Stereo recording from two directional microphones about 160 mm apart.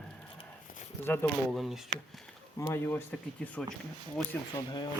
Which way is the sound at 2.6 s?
15° left (ahead or behind).